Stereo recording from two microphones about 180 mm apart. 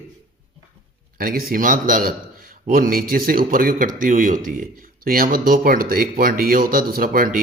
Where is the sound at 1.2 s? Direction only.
55° right (ahead or behind).